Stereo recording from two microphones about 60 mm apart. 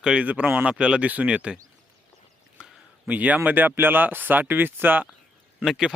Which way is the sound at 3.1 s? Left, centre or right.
Right.